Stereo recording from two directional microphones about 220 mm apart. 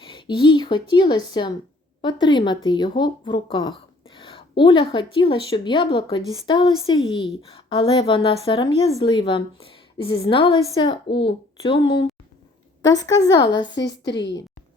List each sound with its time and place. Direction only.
0.0 s a woman's voice: 20° left (ahead or behind)